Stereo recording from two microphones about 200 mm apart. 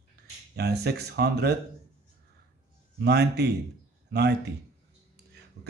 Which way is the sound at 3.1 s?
55° right (ahead or behind).